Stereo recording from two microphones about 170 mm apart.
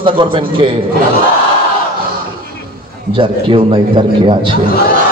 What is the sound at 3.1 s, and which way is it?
A man's voice, 30° right (ahead or behind).